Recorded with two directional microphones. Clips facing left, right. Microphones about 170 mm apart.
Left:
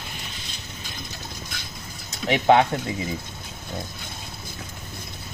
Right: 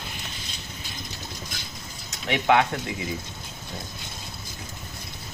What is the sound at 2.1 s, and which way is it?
Speech, 35° left (ahead or behind).